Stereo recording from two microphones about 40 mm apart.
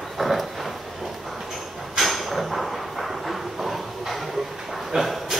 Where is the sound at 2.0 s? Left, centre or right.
Centre.